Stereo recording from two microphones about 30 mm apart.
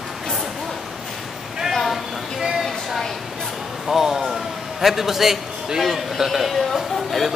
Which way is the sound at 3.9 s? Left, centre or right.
Centre.